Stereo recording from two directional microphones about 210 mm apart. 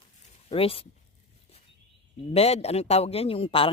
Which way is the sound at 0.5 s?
25° left (ahead or behind).